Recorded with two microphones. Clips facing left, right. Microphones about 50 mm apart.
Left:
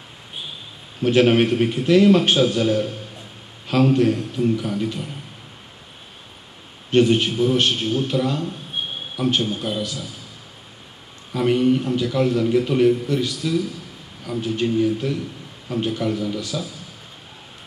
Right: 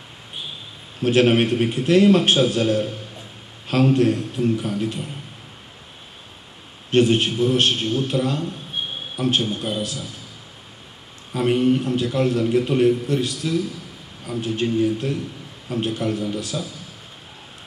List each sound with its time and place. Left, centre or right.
1.0 s a man's voice: centre
6.9 s a man's voice: centre
11.3 s a man's voice: centre
12.2 s a man's voice: centre